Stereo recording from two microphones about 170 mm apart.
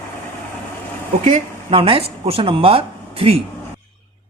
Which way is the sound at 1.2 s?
35° right (ahead or behind).